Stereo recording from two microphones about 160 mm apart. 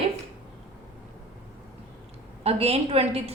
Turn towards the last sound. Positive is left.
turn(degrees=-40)  # may be behind; listen again after turning